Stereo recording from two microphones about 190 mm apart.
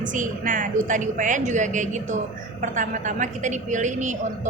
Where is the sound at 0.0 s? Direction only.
45° right (ahead or behind).